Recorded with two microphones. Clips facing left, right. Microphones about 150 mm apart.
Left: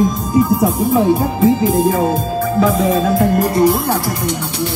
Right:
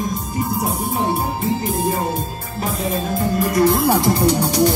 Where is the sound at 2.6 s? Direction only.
90° left.